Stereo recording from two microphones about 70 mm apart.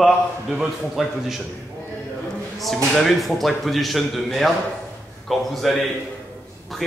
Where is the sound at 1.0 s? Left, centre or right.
Centre.